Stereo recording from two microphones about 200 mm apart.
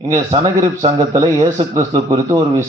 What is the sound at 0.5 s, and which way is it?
A man's voice, 15° right (ahead or behind).